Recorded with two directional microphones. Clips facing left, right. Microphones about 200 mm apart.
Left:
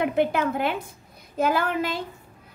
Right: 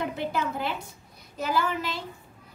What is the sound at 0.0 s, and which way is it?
Child singing, 60° left (ahead or behind).